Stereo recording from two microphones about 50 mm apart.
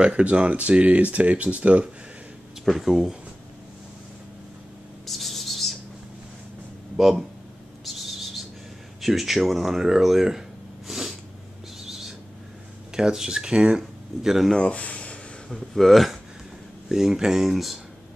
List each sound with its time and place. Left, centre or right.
0.0 s speech: right
2.6 s speech: centre
5.0 s a sound: centre
7.0 s speech: centre
7.8 s owl: centre
9.0 s speech: centre
10.9 s sneeze: centre
12.9 s speech: centre
14.5 s speech: left
15.5 s speech: centre
16.9 s speech: centre